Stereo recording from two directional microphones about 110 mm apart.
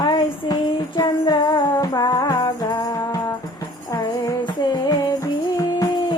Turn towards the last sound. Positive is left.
turn(degrees=35)  # may be behind; listen again after turning